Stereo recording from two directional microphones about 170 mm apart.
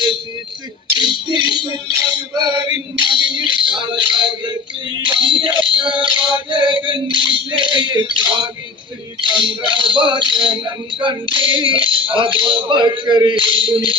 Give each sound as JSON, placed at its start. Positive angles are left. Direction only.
{"t": 1.0, "sound": "music", "side_deg": -25}
{"t": 5.4, "sound": "a sound", "side_deg": -30}
{"t": 9.2, "sound": "music", "side_deg": -30}